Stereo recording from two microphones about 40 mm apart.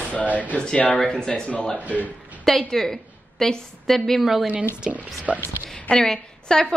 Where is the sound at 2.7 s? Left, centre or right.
Centre.